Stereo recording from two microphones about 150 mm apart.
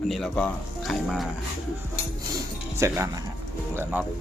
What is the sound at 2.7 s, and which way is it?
Speech, 20° right (ahead or behind).